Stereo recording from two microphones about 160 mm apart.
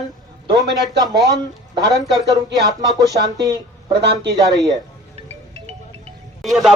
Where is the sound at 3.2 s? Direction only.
25° right (ahead or behind).